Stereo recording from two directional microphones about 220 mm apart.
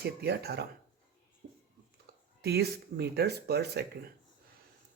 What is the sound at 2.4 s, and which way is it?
Speech, 45° right (ahead or behind).